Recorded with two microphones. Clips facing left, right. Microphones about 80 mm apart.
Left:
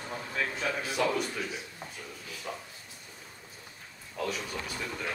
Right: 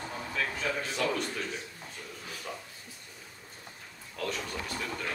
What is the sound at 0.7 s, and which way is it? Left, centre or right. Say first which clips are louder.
Speech: left 2 dB; centre.